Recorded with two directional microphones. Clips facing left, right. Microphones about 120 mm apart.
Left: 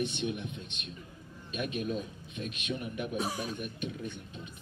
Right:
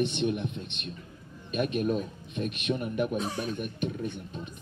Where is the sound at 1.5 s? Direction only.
50° right (ahead or behind).